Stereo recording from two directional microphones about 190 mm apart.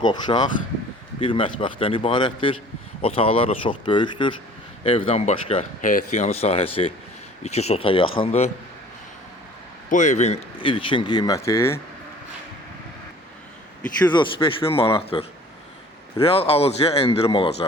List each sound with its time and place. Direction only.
0.0 s speech: 25° left (ahead or behind)
5.8 s speech: 40° left (ahead or behind)
9.9 s speech: 40° left (ahead or behind); by 11.8 s 15° left (ahead or behind)
14.1 s speech: 25° left (ahead or behind)